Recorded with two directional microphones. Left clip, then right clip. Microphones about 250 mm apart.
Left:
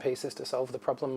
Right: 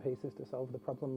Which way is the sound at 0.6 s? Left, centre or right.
Centre.